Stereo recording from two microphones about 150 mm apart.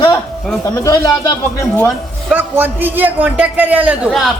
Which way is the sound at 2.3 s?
10° right (ahead or behind).